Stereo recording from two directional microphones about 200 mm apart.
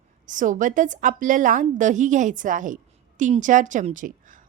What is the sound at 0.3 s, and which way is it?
A woman's voice, 40° right (ahead or behind).